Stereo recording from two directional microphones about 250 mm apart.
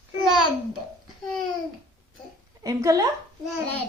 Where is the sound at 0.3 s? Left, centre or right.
Right.